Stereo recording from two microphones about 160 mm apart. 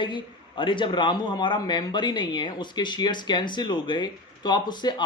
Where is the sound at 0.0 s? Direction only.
30° left (ahead or behind).